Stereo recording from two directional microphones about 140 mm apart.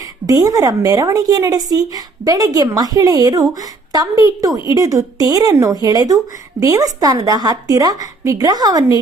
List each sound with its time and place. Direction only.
0.3 s a woman's voice: 25° right (ahead or behind)